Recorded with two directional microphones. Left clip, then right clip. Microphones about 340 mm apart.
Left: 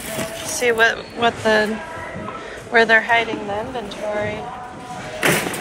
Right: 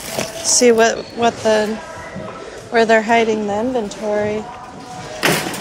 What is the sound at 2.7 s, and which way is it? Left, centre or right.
A woman's voice, centre.